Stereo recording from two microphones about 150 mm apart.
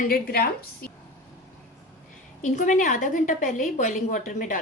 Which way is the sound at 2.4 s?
55° left (ahead or behind).